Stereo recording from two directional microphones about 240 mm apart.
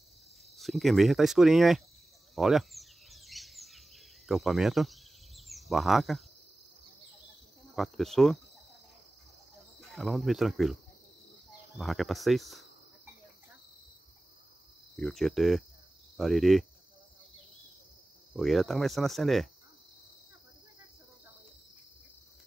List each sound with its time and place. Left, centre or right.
0.6 s speech: centre
2.3 s a sound: centre
7.7 s speech: centre
9.8 s speech: centre
11.8 s speech: centre
15.0 s speech: centre
18.3 s speech: centre